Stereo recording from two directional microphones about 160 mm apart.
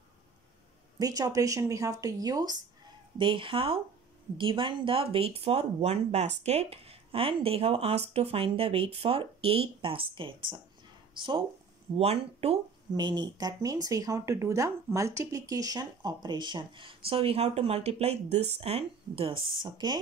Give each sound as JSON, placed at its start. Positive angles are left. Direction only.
{"t": 0.9, "sound": "speech", "side_deg": -25}
{"t": 12.9, "sound": "speech", "side_deg": -25}